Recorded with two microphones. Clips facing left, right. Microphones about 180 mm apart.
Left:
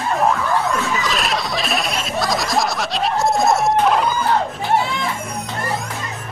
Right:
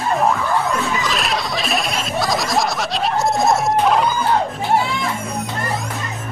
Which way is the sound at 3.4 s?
Centre (ahead or behind).